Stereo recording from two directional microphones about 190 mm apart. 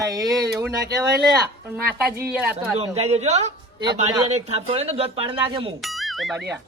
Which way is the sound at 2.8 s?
35° right (ahead or behind).